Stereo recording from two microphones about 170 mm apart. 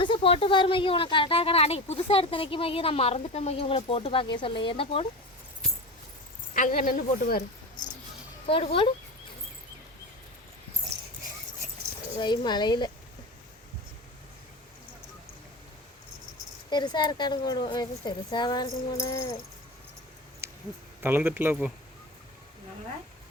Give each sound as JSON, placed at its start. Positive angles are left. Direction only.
{"t": 0.0, "sound": "a woman's voice", "side_deg": 30}
{"t": 6.5, "sound": "a woman's voice", "side_deg": 50}
{"t": 8.4, "sound": "a woman's voice", "side_deg": 30}
{"t": 12.2, "sound": "speech", "side_deg": 25}
{"t": 16.6, "sound": "speech", "side_deg": 25}
{"t": 20.4, "sound": "a sound", "side_deg": -15}
{"t": 21.0, "sound": "speech", "side_deg": -10}